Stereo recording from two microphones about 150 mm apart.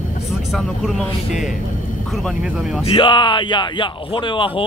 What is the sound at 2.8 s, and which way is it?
Speech, 35° left (ahead or behind).